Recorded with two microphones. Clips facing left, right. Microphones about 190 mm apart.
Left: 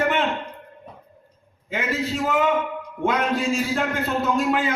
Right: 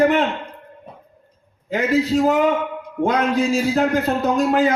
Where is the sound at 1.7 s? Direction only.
40° right (ahead or behind).